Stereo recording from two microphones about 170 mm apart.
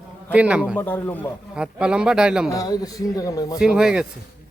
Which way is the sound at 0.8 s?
10° left (ahead or behind).